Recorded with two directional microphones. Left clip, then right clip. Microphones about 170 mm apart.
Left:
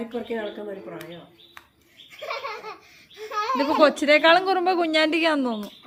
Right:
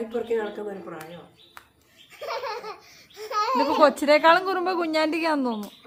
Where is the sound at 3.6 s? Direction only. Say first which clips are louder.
Left 1 dB; centre (ahead or behind).